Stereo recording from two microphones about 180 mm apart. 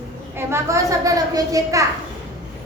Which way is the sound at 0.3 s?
15° right (ahead or behind).